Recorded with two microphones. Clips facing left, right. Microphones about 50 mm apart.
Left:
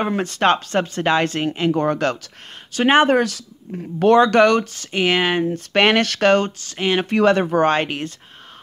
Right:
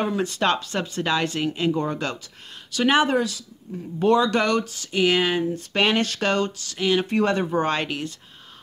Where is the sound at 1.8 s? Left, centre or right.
Left.